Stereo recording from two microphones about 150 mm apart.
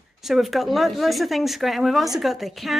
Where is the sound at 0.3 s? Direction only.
Centre (ahead or behind).